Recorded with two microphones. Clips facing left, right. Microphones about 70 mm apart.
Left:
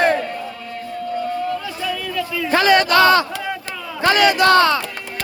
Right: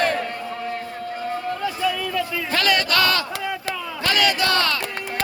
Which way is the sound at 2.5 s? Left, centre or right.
Left.